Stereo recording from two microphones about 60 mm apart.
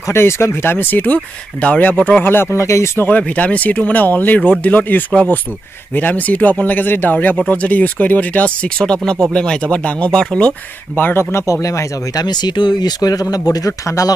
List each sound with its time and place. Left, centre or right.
0.0 s speech: left
3.1 s speech: left
11.0 s speech: left
11.3 s speech: left
11.6 s speech: left
13.0 s speech: left